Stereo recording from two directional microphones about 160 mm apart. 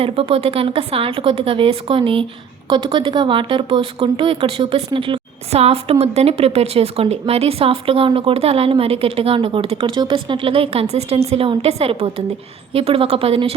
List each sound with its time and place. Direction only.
0.0 s speech: 35° right (ahead or behind)